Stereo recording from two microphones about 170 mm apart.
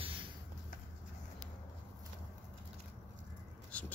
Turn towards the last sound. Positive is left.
turn(degrees=5)  # may be behind; listen again after turning